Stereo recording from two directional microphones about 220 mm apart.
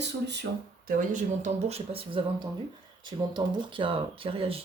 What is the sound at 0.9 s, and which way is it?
A woman's voice, 35° right (ahead or behind).